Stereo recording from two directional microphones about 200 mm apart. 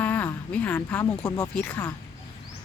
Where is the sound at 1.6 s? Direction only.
10° left (ahead or behind).